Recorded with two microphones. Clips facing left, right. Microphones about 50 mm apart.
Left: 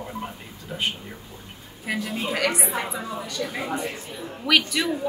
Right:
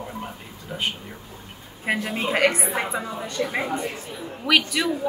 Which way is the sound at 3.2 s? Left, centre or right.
Right.